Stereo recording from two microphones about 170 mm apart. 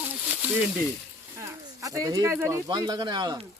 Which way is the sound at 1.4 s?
20° right (ahead or behind).